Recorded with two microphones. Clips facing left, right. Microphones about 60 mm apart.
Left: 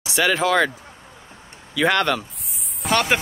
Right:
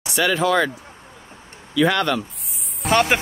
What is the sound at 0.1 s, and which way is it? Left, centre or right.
Speech, left.